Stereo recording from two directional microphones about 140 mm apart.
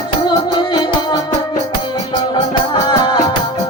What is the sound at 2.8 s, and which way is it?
Music, 30° left (ahead or behind).